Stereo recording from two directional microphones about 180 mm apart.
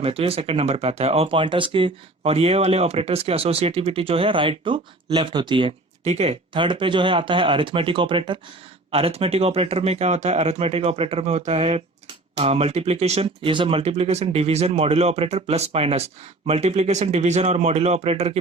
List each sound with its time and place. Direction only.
0.0 s speech: 30° right (ahead or behind)